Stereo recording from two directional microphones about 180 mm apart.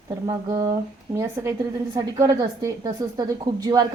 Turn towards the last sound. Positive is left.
turn(degrees=-20)  # may be behind; listen again after turning